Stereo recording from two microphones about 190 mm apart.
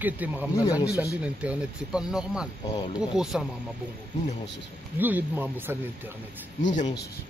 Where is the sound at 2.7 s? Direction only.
20° left (ahead or behind).